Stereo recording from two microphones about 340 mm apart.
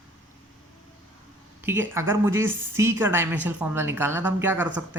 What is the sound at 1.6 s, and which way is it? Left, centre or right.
A woman's voice, centre.